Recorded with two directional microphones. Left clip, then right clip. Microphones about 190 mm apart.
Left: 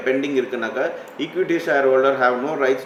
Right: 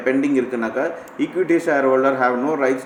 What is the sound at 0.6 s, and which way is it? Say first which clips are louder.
Speech: right 1 dB; 40° right (ahead or behind).